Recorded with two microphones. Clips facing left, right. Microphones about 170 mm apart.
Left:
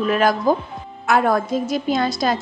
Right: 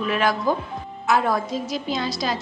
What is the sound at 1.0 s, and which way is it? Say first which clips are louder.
Speech: left 4 dB; 55° left (ahead or behind).